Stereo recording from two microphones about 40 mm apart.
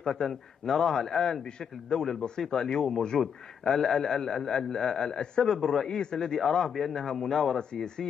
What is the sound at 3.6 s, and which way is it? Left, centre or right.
A man's voice, centre.